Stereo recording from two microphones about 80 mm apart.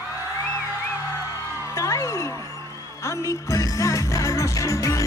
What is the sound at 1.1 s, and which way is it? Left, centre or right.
Music, left.